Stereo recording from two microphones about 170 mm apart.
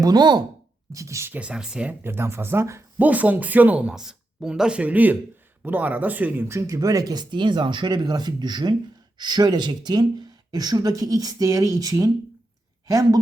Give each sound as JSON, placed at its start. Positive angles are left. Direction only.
{"t": 0.0, "sound": "speech", "side_deg": -25}